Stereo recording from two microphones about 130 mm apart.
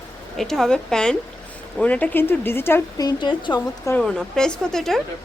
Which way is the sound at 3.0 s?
35° left (ahead or behind).